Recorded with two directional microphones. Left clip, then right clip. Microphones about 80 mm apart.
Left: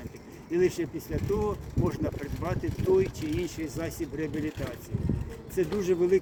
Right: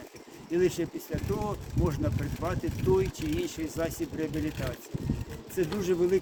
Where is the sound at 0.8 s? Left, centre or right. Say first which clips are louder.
Left 1 dB; right.